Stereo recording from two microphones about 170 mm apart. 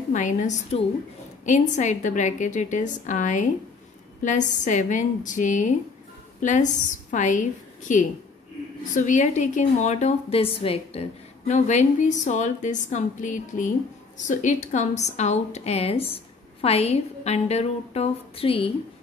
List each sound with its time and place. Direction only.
0.1 s a woman's voice: 45° left (ahead or behind)
8.9 s a woman's voice: 45° left (ahead or behind)